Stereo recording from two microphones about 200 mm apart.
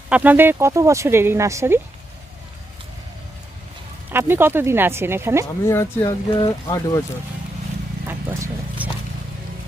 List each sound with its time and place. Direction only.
0.1 s speech: 10° right (ahead or behind)
4.1 s speech: 10° right (ahead or behind)
5.6 s speech: 15° left (ahead or behind)
8.0 s clip-clop: 10° right (ahead or behind)